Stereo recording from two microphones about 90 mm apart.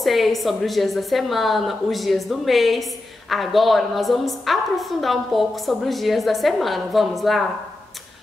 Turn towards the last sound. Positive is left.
turn(degrees=0)  # may be behind; listen again after turning